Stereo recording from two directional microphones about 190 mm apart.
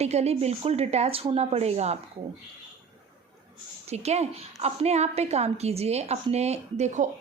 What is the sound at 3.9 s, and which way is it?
A woman's voice, 35° right (ahead or behind).